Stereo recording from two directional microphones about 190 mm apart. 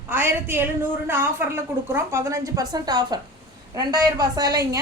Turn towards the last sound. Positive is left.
turn(degrees=-20)  # may be behind; listen again after turning